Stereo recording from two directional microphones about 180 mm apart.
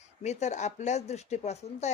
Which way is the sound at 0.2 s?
40° left (ahead or behind).